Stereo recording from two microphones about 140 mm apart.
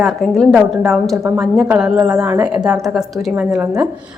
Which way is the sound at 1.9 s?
25° right (ahead or behind).